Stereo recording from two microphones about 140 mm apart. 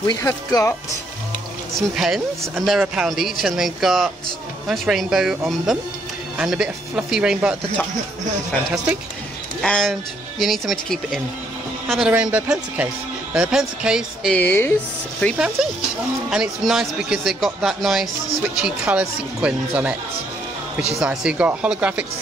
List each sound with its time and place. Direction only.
0.0 s speech: 25° left (ahead or behind)
1.7 s speech: centre (ahead or behind)
12.1 s a man's voice: 10° right (ahead or behind)
14.3 s speech: 15° left (ahead or behind)
15.3 s a man's voice: 5° right (ahead or behind)
21.0 s a man's voice: 5° right (ahead or behind)